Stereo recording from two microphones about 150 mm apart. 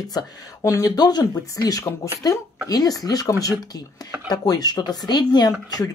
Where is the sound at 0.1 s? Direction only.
25° left (ahead or behind).